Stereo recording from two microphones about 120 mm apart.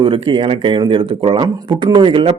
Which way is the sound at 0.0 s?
45° right (ahead or behind).